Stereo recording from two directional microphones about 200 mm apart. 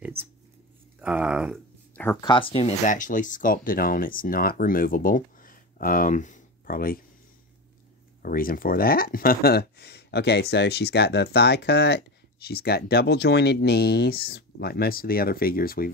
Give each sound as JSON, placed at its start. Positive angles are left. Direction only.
{"t": 1.0, "sound": "speech", "side_deg": -5}
{"t": 2.2, "sound": "speech", "side_deg": 25}
{"t": 8.2, "sound": "speech", "side_deg": 45}